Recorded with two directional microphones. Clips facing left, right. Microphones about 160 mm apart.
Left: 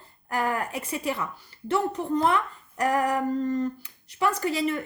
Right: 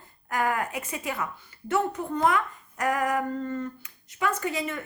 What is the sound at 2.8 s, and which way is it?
Speech, 35° left (ahead or behind).